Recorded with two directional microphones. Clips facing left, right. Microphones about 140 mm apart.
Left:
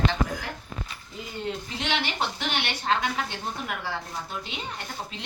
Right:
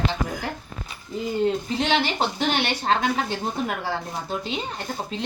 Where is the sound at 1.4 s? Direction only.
35° right (ahead or behind).